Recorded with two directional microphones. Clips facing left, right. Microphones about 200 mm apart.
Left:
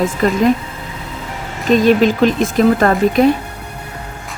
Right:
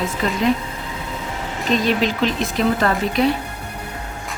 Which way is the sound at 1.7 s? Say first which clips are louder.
Left 8 dB; 50° left (ahead or behind).